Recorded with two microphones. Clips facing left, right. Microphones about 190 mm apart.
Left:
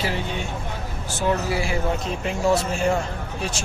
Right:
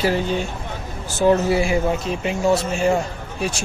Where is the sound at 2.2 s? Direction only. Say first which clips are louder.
Right 2 dB; 5° right (ahead or behind).